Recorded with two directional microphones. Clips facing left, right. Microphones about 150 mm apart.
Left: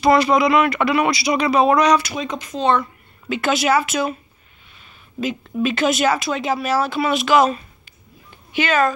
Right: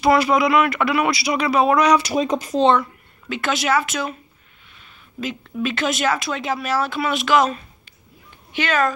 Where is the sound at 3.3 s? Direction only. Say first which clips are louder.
Left 3 dB; 5° left (ahead or behind).